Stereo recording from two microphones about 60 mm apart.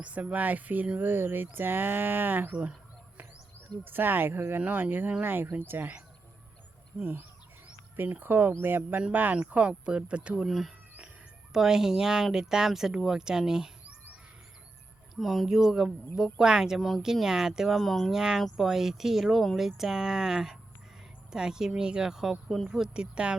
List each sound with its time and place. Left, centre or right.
0.0 s speech: right
3.8 s speech: right
7.0 s speech: right
9.5 s speech: centre
10.4 s speech: centre
15.1 s speech: centre
18.1 s speech: centre
22.4 s speech: centre
22.7 s speech: centre